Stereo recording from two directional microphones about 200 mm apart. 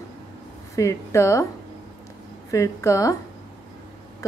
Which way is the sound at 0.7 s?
15° left (ahead or behind).